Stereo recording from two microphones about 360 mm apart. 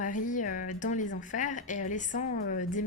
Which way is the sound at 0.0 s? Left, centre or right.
Left.